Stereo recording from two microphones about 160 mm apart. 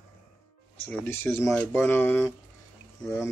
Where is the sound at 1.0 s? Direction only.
15° left (ahead or behind).